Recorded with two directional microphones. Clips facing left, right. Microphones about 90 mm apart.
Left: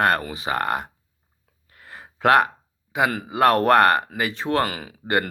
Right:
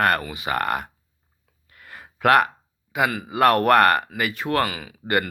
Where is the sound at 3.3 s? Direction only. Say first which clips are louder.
Even; 25° left (ahead or behind).